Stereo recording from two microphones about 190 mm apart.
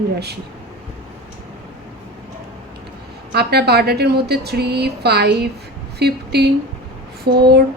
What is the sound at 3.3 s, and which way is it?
Speech, 55° right (ahead or behind).